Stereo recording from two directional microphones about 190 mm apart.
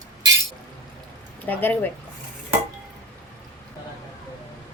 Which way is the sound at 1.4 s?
10° left (ahead or behind).